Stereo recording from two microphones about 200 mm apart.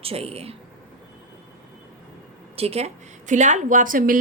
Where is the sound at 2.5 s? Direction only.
30° right (ahead or behind).